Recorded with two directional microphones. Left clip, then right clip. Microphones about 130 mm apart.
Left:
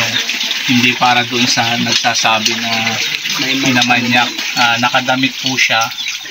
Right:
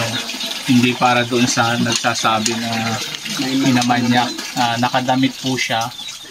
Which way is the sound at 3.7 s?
15° right (ahead or behind).